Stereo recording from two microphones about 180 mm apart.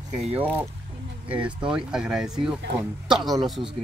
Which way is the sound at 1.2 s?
5° right (ahead or behind).